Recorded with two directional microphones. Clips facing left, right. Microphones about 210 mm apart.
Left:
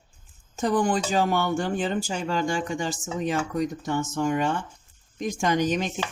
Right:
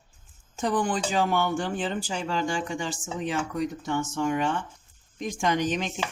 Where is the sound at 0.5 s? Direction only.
40° left (ahead or behind).